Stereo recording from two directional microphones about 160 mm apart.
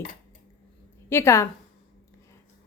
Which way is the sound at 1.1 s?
15° left (ahead or behind).